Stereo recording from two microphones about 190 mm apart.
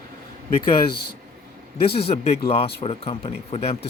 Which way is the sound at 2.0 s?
35° left (ahead or behind).